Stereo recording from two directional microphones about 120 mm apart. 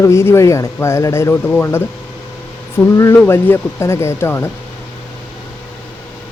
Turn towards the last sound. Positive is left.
turn(degrees=20)  # may be behind; listen again after turning